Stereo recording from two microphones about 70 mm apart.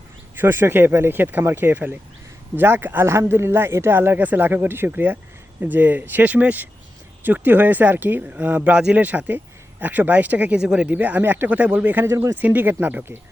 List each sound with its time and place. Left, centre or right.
0.3 s speech: right